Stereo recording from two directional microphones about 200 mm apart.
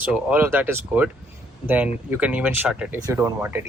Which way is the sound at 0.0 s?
10° right (ahead or behind).